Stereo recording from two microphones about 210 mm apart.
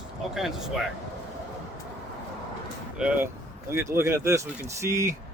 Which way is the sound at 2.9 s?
5° right (ahead or behind).